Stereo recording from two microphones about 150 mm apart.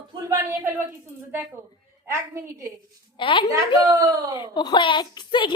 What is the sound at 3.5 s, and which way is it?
Speech, 20° right (ahead or behind).